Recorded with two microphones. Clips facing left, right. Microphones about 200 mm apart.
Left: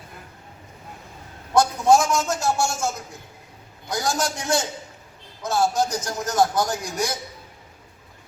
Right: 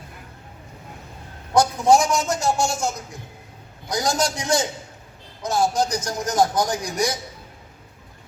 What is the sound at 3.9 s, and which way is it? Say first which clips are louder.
Speech: right 2 dB; 15° right (ahead or behind).